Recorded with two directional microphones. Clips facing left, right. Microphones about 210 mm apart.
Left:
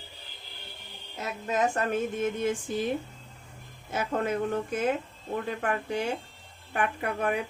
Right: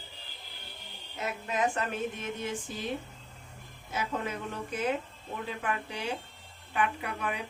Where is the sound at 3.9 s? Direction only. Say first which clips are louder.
Left 5 dB; 50° left (ahead or behind).